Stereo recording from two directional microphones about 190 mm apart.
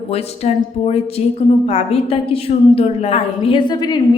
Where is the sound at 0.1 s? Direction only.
35° left (ahead or behind).